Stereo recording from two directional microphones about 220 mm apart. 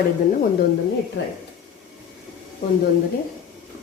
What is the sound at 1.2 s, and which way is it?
Speech, 60° left (ahead or behind).